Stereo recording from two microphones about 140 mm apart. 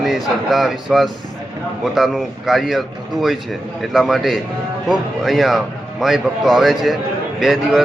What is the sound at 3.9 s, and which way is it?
Speech, centre (ahead or behind).